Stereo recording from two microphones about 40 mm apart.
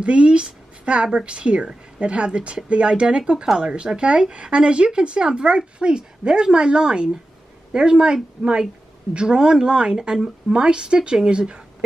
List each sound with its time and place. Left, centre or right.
0.0 s a woman's voice: right